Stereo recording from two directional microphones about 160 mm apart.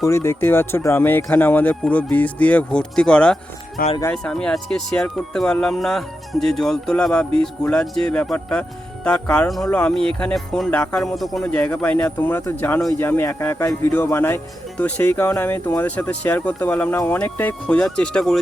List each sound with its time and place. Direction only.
0.0 s speech: 20° left (ahead or behind)
3.8 s speech: 70° left (ahead or behind)
4.1 s speech: 5° left (ahead or behind)